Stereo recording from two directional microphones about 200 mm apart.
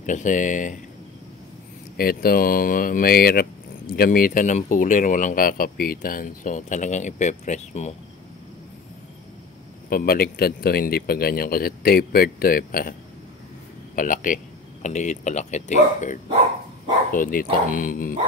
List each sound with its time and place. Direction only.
0.0 s speech: 40° left (ahead or behind)
2.0 s speech: 50° left (ahead or behind)
9.8 s speech: 45° left (ahead or behind)
13.9 s speech: 40° left (ahead or behind)